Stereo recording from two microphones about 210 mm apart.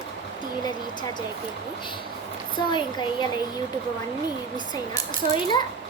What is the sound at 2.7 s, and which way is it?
Speech, 20° left (ahead or behind).